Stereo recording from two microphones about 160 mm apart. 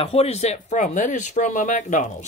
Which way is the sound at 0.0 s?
40° left (ahead or behind).